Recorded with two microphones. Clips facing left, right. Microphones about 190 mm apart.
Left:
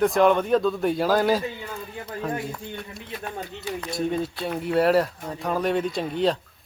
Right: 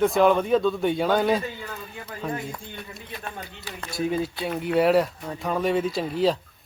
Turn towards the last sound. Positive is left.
turn(degrees=0)  # may be behind; listen again after turning